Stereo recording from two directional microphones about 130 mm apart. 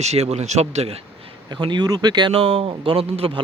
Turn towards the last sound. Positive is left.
turn(degrees=-45)  # may be behind; listen again after turning